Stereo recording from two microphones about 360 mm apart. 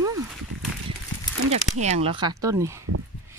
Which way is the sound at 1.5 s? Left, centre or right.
Centre.